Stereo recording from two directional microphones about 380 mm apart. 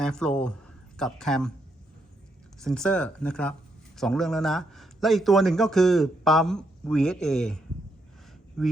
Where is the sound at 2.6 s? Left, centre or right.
Centre.